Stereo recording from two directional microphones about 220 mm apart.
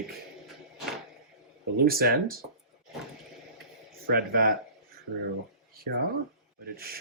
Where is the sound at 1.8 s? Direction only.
45° right (ahead or behind).